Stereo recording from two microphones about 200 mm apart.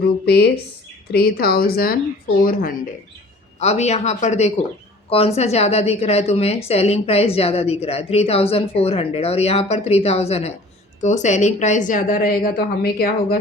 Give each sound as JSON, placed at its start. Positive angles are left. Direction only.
{"t": 1.1, "sound": "a woman's voice", "side_deg": 50}
{"t": 3.6, "sound": "speech", "side_deg": 35}